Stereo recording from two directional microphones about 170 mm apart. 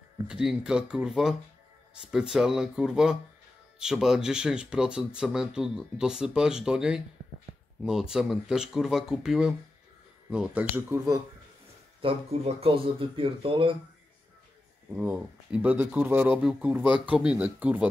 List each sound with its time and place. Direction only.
0.3 s speech: 5° right (ahead or behind)
12.0 s speech: 35° right (ahead or behind)
15.0 s speech: 10° right (ahead or behind)